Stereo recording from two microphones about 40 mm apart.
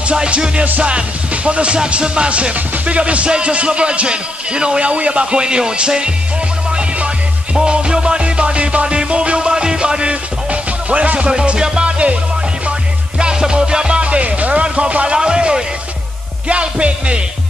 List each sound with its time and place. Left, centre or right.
0.1 s music: right
7.5 s music: right
13.2 s music: right